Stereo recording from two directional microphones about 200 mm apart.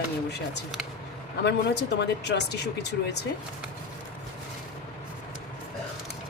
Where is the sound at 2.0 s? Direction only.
60° left (ahead or behind).